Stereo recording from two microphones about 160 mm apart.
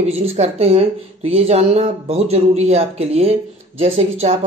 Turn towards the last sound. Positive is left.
turn(degrees=-45)  # may be behind; listen again after turning